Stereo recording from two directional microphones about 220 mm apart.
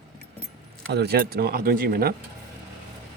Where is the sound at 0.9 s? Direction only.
45° right (ahead or behind).